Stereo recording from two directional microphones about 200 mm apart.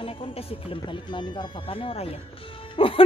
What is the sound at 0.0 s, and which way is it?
Speech, 30° left (ahead or behind).